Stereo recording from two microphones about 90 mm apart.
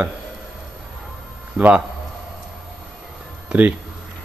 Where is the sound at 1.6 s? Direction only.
10° right (ahead or behind).